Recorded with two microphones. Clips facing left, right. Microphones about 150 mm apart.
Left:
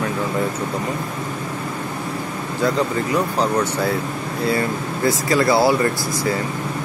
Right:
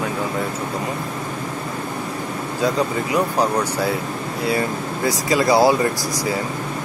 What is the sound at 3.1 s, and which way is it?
Speech, 10° right (ahead or behind).